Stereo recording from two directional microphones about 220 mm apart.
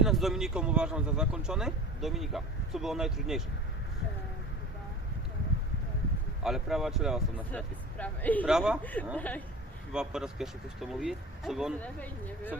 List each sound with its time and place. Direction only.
0.0 s speech: centre (ahead or behind)
6.4 s speech: centre (ahead or behind)